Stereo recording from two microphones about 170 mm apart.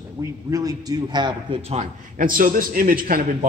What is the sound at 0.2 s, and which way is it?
A man's voice, 20° right (ahead or behind).